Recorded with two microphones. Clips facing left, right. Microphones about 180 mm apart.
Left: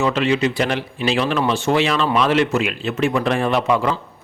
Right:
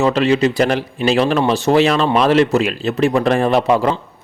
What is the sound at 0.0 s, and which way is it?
A man's voice, 35° right (ahead or behind).